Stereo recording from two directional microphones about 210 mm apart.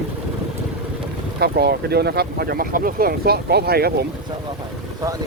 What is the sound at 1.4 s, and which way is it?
Speech, 50° right (ahead or behind).